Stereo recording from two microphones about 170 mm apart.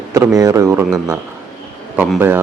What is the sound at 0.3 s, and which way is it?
Speech, 20° right (ahead or behind).